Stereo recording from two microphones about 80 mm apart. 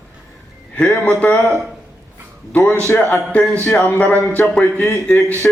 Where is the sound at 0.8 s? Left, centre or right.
Centre.